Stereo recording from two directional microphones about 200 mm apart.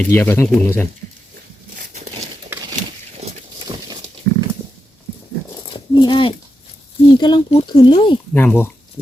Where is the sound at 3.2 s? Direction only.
35° right (ahead or behind).